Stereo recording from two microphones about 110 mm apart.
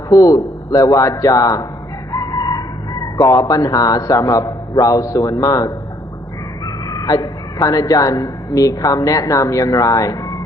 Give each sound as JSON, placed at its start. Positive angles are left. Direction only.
{"t": 0.1, "sound": "a man's voice", "side_deg": 30}
{"t": 2.1, "sound": "crowing", "side_deg": 35}
{"t": 3.2, "sound": "a man's voice", "side_deg": 35}
{"t": 6.8, "sound": "a woman's voice", "side_deg": 35}